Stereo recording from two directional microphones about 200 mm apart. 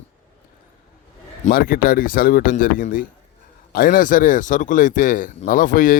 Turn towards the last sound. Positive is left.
turn(degrees=45)  # may be behind; listen again after turning